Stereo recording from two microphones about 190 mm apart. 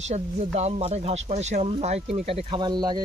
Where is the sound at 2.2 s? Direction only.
30° right (ahead or behind).